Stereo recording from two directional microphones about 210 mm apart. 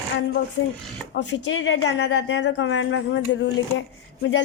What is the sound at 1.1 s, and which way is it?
A woman's voice, 55° left (ahead or behind).